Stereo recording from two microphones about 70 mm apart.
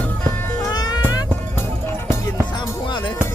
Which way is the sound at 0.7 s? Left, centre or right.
Left.